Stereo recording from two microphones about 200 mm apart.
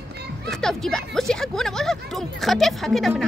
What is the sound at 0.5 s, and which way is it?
Speech, centre (ahead or behind).